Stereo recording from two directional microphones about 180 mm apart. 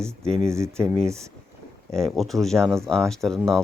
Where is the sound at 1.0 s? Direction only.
15° right (ahead or behind).